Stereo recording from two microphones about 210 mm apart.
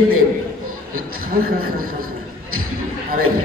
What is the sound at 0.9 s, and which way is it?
A man's voice, 45° right (ahead or behind).